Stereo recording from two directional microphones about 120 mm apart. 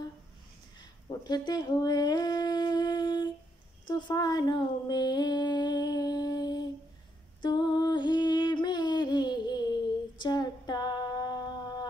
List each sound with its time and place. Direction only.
0.7 s humming: 35° left (ahead or behind)
3.8 s a sound: 30° left (ahead or behind)
7.4 s music: 35° left (ahead or behind)